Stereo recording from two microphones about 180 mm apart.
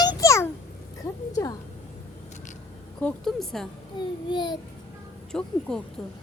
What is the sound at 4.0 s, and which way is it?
Speech, 25° left (ahead or behind).